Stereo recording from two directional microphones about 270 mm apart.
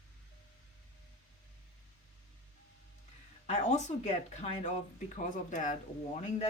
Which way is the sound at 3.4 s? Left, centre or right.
Left.